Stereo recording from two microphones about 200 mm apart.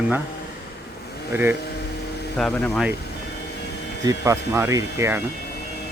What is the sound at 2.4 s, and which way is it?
Speech, 5° left (ahead or behind).